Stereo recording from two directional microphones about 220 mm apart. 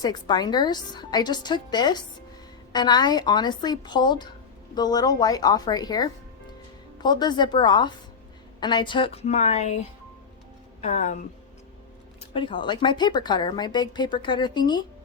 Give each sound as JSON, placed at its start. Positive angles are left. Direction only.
{"t": 0.0, "sound": "a woman's voice", "side_deg": 20}
{"t": 10.8, "sound": "speech", "side_deg": 35}
{"t": 12.3, "sound": "speech", "side_deg": 25}